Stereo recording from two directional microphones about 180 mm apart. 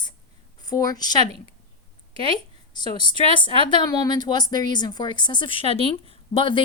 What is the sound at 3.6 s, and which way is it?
A woman's voice, 25° left (ahead or behind).